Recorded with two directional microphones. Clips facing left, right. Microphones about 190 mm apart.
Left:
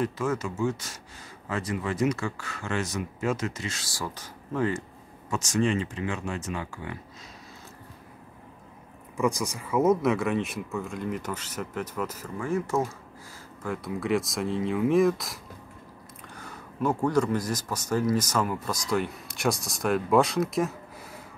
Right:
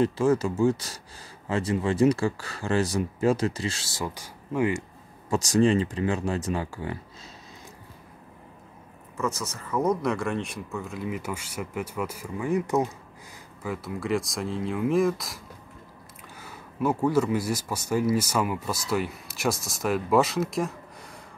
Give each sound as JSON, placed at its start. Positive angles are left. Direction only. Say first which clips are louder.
{"t": 0.0, "sound": "speech", "louder": "right 6 dB", "side_deg": -30}
{"t": 4.1, "sound": "speech", "louder": "right 2 dB", "side_deg": -10}
{"t": 5.3, "sound": "speech", "louder": "right 5 dB", "side_deg": -35}
{"t": 9.1, "sound": "speech", "louder": "left 4 dB", "side_deg": 15}
{"t": 13.6, "sound": "speech", "louder": "left 1 dB", "side_deg": 0}